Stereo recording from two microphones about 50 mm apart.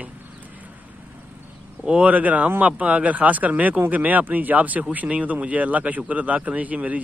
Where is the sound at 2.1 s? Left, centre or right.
Right.